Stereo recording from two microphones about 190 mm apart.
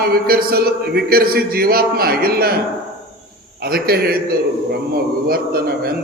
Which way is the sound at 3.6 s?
55° right (ahead or behind).